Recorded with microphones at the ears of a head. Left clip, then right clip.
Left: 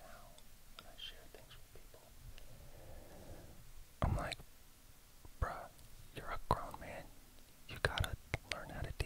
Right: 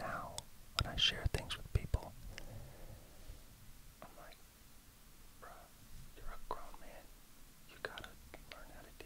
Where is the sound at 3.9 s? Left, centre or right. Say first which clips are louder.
Left 15 dB; left.